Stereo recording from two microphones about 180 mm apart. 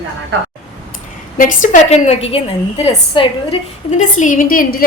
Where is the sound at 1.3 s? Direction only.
45° left (ahead or behind); by 3.6 s 30° left (ahead or behind).